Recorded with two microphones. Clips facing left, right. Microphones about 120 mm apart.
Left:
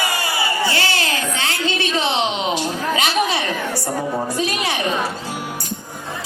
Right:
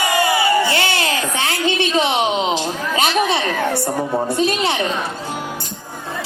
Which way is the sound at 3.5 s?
60° right (ahead or behind).